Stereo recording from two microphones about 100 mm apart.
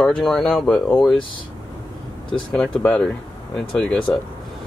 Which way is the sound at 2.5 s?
5° left (ahead or behind).